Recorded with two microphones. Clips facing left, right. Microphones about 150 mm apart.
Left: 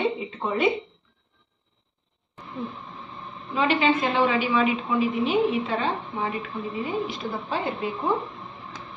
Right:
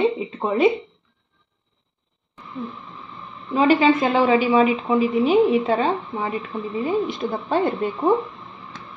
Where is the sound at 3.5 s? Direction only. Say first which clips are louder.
Right 6 dB; 40° right (ahead or behind).